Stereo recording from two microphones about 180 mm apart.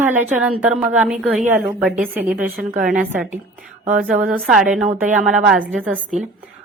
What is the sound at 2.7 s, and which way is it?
Speech, 50° right (ahead or behind).